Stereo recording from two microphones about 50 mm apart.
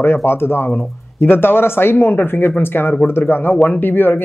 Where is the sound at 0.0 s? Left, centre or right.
Left.